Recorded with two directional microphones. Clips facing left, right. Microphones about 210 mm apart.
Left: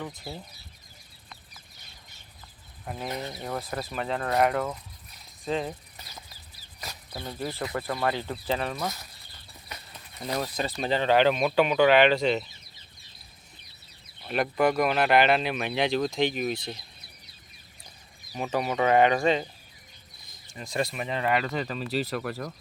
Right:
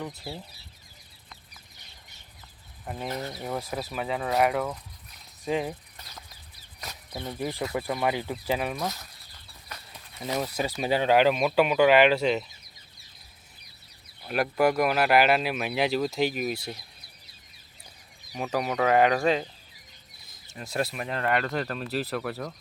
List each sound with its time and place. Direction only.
0.3 s speech: 5° right (ahead or behind)
2.8 s speech: centre (ahead or behind)
3.1 s speech: 15° left (ahead or behind)
3.3 s speech: 5° right (ahead or behind)
6.0 s chicken: 10° left (ahead or behind)
7.3 s speech: 15° right (ahead or behind)
14.3 s speech: centre (ahead or behind)
18.3 s speech: centre (ahead or behind)
20.5 s speech: 5° right (ahead or behind)